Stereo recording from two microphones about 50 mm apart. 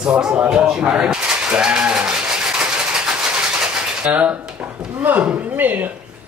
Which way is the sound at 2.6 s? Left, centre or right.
Centre.